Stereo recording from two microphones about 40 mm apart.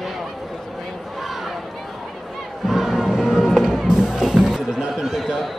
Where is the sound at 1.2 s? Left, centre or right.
Centre.